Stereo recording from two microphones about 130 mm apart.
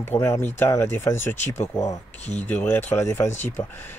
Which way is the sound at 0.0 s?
20° left (ahead or behind).